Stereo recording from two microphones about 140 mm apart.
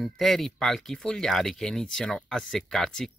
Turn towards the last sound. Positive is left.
turn(degrees=5)  # may be behind; listen again after turning